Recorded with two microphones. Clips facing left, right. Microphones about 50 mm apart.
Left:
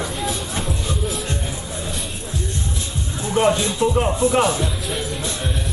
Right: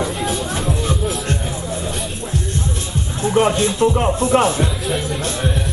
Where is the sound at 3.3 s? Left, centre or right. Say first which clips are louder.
Right 2 dB; centre.